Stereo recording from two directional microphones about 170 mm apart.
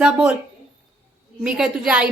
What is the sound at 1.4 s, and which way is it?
Speech, 5° right (ahead or behind).